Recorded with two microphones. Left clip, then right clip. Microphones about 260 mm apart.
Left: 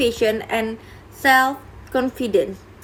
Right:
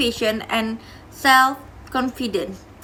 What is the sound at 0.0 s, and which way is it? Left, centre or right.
A woman's voice, centre.